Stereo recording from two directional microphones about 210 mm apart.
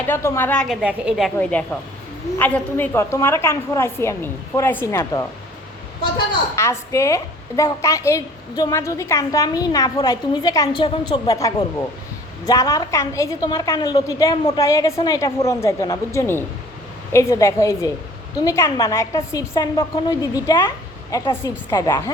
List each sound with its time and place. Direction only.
0.1 s a woman's voice: 10° left (ahead or behind)